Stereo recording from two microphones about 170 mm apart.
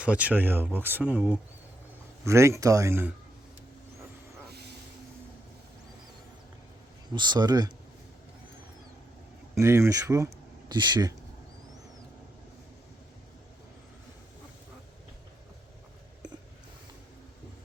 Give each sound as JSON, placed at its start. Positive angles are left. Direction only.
{"t": 0.0, "sound": "speech", "side_deg": -10}
{"t": 7.1, "sound": "speech", "side_deg": -25}
{"t": 9.6, "sound": "speech", "side_deg": -15}